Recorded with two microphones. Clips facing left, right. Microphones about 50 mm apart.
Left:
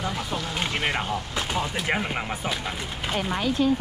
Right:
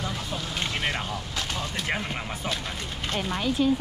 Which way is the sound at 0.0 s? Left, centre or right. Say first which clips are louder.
Left 3 dB; centre.